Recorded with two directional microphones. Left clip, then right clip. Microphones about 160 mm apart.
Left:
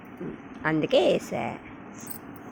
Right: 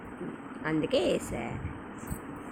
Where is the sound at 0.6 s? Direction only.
30° left (ahead or behind).